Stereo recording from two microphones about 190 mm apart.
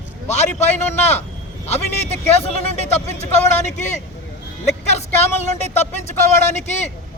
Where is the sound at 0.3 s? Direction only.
35° left (ahead or behind).